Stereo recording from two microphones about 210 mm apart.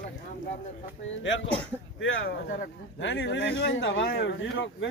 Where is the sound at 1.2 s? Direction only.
60° left (ahead or behind).